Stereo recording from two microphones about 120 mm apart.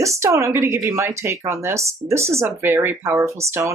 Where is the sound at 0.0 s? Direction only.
25° right (ahead or behind).